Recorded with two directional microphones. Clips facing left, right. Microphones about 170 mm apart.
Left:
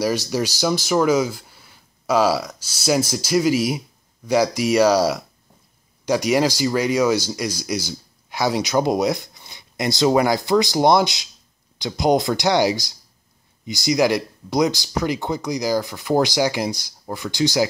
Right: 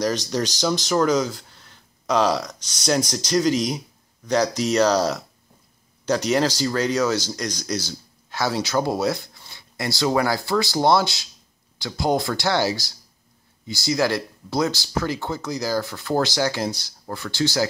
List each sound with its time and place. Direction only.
0.0 s speech: 10° left (ahead or behind)